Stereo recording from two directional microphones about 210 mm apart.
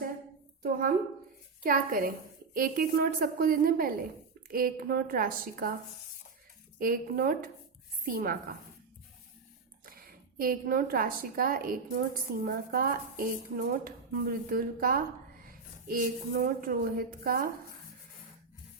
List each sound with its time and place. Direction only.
0.6 s a woman's voice: 40° right (ahead or behind)
6.7 s speech: 45° right (ahead or behind)
9.8 s a woman's voice: 45° right (ahead or behind)